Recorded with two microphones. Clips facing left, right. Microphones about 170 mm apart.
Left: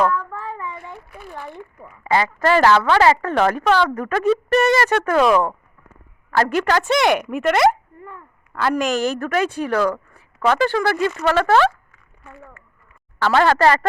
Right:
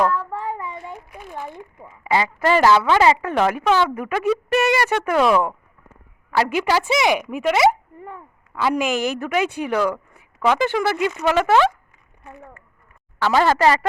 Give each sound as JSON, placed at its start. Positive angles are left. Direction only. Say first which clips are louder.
{"t": 0.1, "sound": "child singing", "louder": "right 1 dB", "side_deg": -25}
{"t": 0.9, "sound": "a sound", "louder": "right 1 dB", "side_deg": -15}
{"t": 2.0, "sound": "a woman's voice", "louder": "left 1 dB", "side_deg": -15}
{"t": 8.0, "sound": "a sound", "louder": "right 2 dB", "side_deg": -15}
{"t": 8.6, "sound": "a woman's voice", "louder": "left 1 dB", "side_deg": -10}
{"t": 13.2, "sound": "a woman's voice", "louder": "left 1 dB", "side_deg": -10}